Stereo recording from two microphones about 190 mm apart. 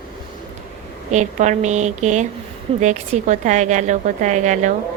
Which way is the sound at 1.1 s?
40° right (ahead or behind).